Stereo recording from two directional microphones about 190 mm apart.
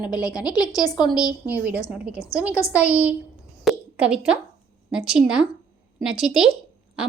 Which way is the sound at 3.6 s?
5° right (ahead or behind).